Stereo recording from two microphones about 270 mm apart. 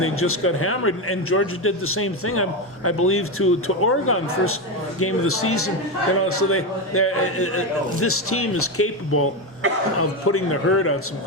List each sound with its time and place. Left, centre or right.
0.0 s a man's voice: left